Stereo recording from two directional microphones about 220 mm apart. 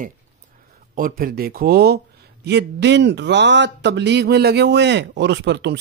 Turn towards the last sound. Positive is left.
turn(degrees=-50)  # may be behind; listen again after turning